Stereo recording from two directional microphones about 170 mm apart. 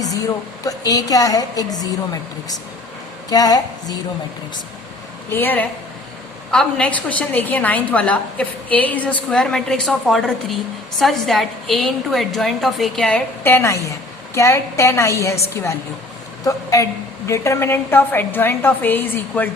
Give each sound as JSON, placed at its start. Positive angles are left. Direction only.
{"t": 0.6, "sound": "a woman's voice", "side_deg": 20}
{"t": 3.2, "sound": "a woman's voice", "side_deg": 20}
{"t": 5.3, "sound": "a woman's voice", "side_deg": 10}